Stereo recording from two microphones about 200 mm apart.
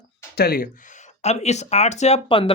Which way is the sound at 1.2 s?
35° left (ahead or behind).